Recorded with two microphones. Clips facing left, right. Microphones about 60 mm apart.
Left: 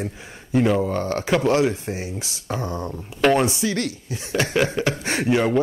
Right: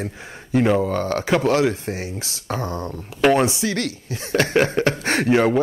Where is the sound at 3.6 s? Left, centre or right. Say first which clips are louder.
Even; right.